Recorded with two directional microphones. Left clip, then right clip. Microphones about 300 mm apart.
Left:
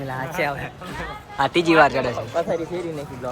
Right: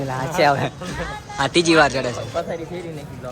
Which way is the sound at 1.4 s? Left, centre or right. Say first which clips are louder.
Even; centre.